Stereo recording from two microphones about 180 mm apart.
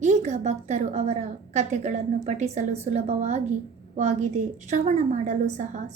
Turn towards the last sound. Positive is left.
turn(degrees=-40)  # may be behind; listen again after turning